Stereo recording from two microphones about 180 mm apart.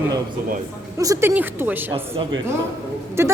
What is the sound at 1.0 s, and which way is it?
A woman's voice, 20° right (ahead or behind).